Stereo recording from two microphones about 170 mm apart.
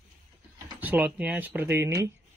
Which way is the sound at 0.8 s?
10° right (ahead or behind).